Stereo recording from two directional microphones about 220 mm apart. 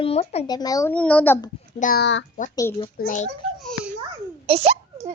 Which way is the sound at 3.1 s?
35° left (ahead or behind).